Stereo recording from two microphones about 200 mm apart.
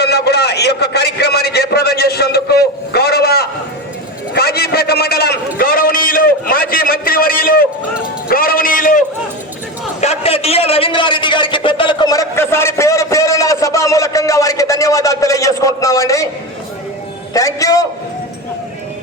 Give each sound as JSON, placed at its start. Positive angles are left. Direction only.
{"t": 0.0, "sound": "a man's voice", "side_deg": 55}
{"t": 8.3, "sound": "a sound", "side_deg": 45}
{"t": 10.0, "sound": "a man's voice", "side_deg": 30}
{"t": 17.3, "sound": "a man's voice", "side_deg": 15}